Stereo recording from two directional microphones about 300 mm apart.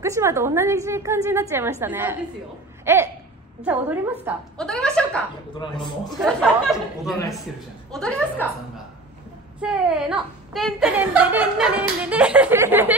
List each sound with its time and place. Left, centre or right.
0.0 s a woman's voice: centre
2.8 s a sound: centre
3.6 s a woman's voice: centre
5.6 s a man's voice: centre
6.0 s a woman's voice: centre
7.9 s a woman's voice: centre
9.6 s a woman's voice: centre